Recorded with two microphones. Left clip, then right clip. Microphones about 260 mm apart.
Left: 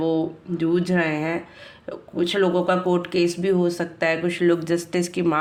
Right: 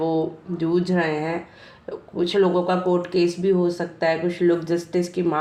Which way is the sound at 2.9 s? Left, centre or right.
Left.